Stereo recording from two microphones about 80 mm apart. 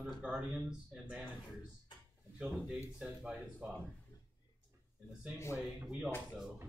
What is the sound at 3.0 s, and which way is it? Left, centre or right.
Speech, centre.